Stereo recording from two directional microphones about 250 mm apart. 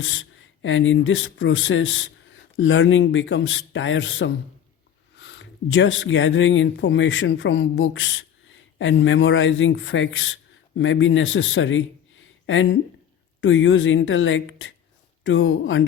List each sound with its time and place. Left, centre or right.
0.0 s speech: left